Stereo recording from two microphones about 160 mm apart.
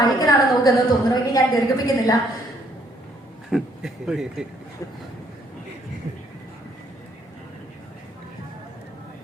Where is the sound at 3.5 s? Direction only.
5° right (ahead or behind).